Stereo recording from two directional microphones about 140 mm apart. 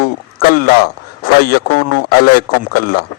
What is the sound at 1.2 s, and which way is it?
A man's voice, 90° left.